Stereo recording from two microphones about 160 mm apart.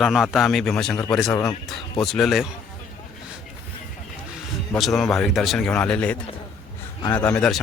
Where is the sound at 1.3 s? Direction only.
15° left (ahead or behind).